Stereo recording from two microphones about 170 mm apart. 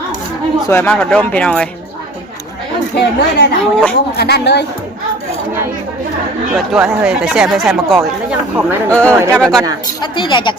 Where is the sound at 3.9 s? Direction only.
70° left (ahead or behind).